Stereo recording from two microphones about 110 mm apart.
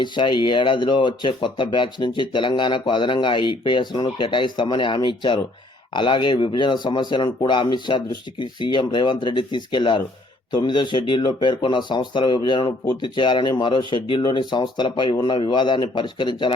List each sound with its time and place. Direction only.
0.0 s speech: 45° left (ahead or behind)